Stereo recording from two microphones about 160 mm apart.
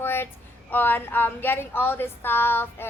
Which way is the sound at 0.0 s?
15° left (ahead or behind).